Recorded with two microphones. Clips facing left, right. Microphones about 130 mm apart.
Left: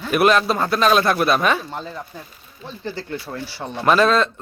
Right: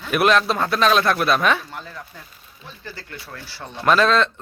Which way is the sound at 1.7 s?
25° left (ahead or behind).